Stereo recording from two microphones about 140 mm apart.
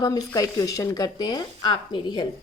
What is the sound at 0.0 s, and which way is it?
A woman's voice, 25° left (ahead or behind).